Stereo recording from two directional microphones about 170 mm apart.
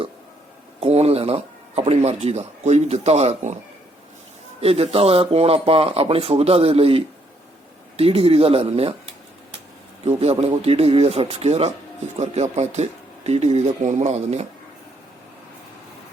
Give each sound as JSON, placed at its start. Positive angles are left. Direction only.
{"t": 0.8, "sound": "a sound", "side_deg": -35}
{"t": 2.2, "sound": "speech", "side_deg": -40}
{"t": 4.6, "sound": "speech", "side_deg": -35}
{"t": 10.0, "sound": "speech", "side_deg": -40}